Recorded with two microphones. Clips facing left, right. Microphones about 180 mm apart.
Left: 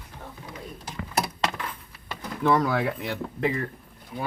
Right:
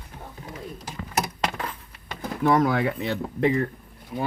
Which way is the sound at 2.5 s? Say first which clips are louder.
Right 3 dB; 20° right (ahead or behind).